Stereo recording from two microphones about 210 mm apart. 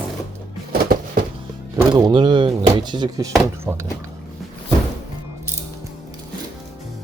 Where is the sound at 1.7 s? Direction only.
20° right (ahead or behind).